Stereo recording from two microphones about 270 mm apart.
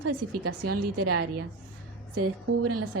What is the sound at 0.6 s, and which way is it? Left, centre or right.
Speech, right.